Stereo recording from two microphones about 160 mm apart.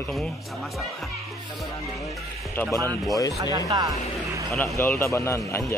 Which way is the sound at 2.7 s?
20° right (ahead or behind).